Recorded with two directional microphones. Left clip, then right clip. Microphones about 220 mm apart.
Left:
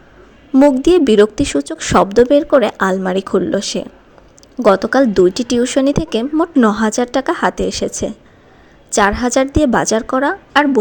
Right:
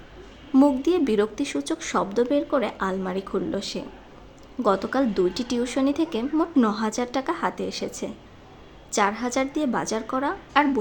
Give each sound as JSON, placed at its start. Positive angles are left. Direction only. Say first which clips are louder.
{"t": 0.5, "sound": "speech", "louder": "left 10 dB", "side_deg": 30}